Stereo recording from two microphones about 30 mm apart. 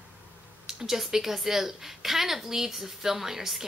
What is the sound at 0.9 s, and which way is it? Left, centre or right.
A woman's voice, centre.